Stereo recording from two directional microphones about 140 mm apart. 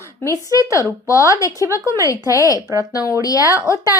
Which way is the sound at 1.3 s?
20° left (ahead or behind).